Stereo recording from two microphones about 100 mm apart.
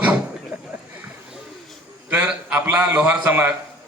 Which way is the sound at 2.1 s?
15° right (ahead or behind).